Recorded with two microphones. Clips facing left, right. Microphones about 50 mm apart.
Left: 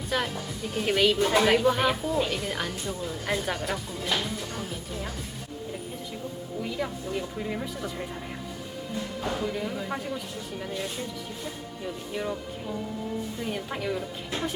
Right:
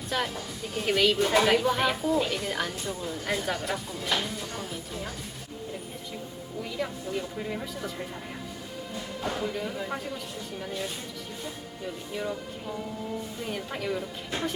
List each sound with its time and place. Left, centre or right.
0.1 s a woman's voice: centre
6.6 s speech: centre
9.2 s a woman's voice: centre
13.5 s a woman's voice: centre